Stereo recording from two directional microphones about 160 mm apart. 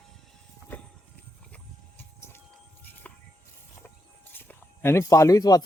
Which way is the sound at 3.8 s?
Centre (ahead or behind).